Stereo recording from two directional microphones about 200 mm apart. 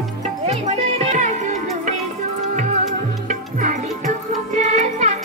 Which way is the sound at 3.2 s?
40° right (ahead or behind).